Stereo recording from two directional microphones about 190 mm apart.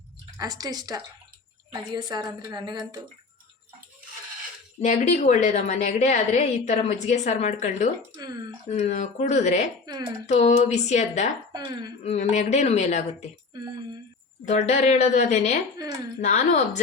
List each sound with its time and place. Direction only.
0.3 s a woman's voice: 20° right (ahead or behind)
4.8 s a woman's voice: 40° left (ahead or behind)
8.1 s a woman's voice: 20° right (ahead or behind)
8.7 s a woman's voice: 35° left (ahead or behind)
11.5 s a woman's voice: 20° right (ahead or behind)
12.0 s a woman's voice: 35° left (ahead or behind)
14.4 s a woman's voice: 40° left (ahead or behind)
15.8 s a woman's voice: 20° right (ahead or behind)
16.2 s a woman's voice: 40° left (ahead or behind)